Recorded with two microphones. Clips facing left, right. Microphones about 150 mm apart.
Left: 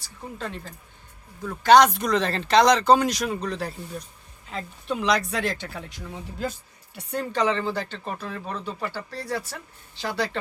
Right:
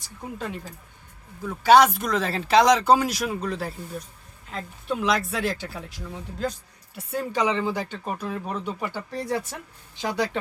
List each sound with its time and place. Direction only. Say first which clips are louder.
0.3 s speech: even; 10° right (ahead or behind)